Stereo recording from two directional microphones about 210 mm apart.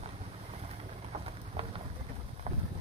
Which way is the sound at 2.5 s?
35° right (ahead or behind).